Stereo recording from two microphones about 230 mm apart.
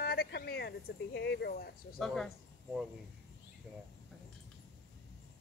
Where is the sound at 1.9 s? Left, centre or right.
Centre.